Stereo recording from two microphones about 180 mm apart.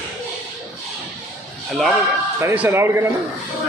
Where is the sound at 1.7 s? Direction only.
Centre (ahead or behind).